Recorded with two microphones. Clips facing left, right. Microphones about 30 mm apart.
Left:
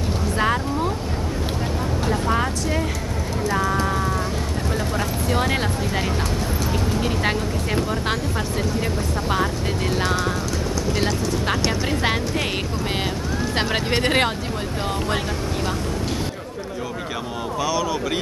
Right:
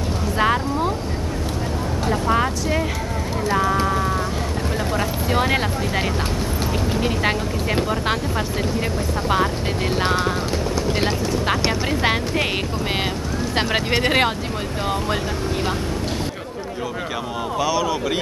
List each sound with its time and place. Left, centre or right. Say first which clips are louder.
0.4 s a sound: right 3 dB; centre
2.0 s vehicle: right 3 dB; centre
3.8 s sheep: right 2 dB; centre
4.9 s vehicle: right 3 dB; centre
9.3 s speech: right 3 dB; centre
10.9 s speech: even; right
12.0 s speech: right 2 dB; centre
13.6 s speech: right 2 dB; centre
17.6 s speech: right 2 dB; centre